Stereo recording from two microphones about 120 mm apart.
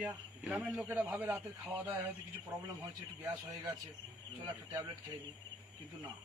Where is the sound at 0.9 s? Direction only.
15° right (ahead or behind).